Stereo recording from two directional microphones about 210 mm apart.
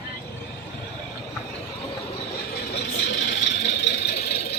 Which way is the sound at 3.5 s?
55° left (ahead or behind).